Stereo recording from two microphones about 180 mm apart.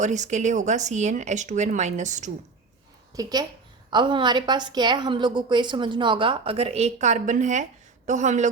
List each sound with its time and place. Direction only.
0.0 s speech: 40° right (ahead or behind)
3.2 s a woman's voice: 20° right (ahead or behind); by 8.4 s 40° right (ahead or behind)